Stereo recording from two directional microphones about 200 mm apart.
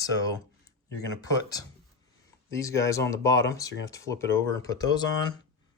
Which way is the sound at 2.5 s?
15° left (ahead or behind).